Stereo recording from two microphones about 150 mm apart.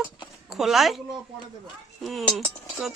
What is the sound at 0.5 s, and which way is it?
Speech, centre (ahead or behind).